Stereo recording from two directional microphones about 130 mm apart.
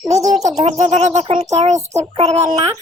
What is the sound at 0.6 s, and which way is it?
A child's voice, 55° right (ahead or behind).